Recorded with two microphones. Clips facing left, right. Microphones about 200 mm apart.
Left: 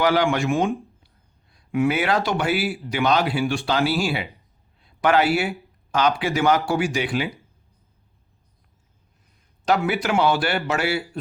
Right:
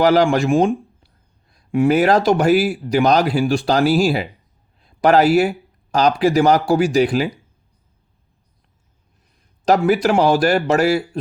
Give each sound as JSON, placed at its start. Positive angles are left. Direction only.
{"t": 0.0, "sound": "speech", "side_deg": -40}
{"t": 1.5, "sound": "a sound", "side_deg": -35}
{"t": 2.2, "sound": "speech", "side_deg": -40}
{"t": 9.6, "sound": "speech", "side_deg": -40}